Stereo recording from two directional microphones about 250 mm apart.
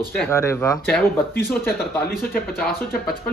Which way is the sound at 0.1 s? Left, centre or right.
Centre.